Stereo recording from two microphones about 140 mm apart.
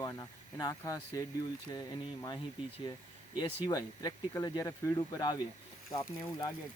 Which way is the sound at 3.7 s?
25° left (ahead or behind).